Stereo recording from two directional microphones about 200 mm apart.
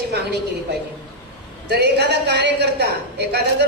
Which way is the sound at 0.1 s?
55° right (ahead or behind).